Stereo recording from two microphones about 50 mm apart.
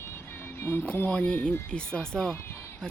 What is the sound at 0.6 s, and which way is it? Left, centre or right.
Speech, left.